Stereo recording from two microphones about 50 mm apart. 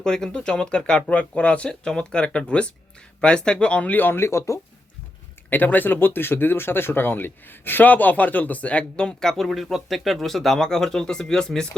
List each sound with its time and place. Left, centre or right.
0.0 s speech: centre
3.9 s speech: left
4.3 s speech: left
5.5 s speech: left; by 11.8 s centre